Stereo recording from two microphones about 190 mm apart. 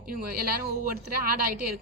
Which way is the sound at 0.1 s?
55° right (ahead or behind).